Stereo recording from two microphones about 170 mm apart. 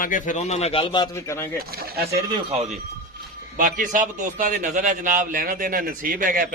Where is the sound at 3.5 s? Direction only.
50° right (ahead or behind).